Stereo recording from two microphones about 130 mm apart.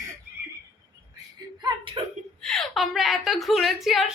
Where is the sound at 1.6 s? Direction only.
40° right (ahead or behind).